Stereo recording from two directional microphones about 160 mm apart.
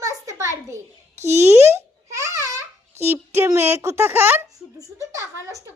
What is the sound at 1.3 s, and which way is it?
Speech, 45° right (ahead or behind).